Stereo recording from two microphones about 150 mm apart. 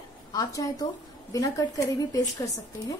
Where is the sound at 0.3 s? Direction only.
25° left (ahead or behind).